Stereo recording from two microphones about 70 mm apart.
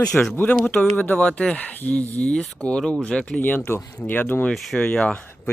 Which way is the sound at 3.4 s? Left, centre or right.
Left.